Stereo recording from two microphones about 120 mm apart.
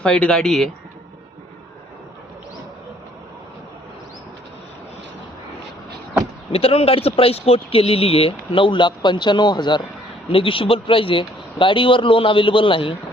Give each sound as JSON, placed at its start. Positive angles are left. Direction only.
{"t": 0.0, "sound": "speech", "side_deg": 5}
{"t": 6.5, "sound": "speech", "side_deg": 55}